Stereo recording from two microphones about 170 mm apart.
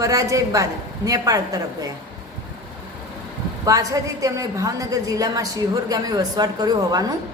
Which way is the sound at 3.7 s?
20° right (ahead or behind).